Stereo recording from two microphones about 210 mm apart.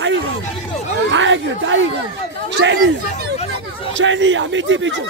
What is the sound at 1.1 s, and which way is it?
Speech, 60° right (ahead or behind).